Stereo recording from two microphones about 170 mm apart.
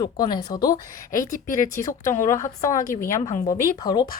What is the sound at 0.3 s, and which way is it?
Speech, 20° left (ahead or behind).